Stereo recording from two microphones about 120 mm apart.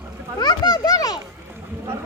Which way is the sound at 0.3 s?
35° left (ahead or behind).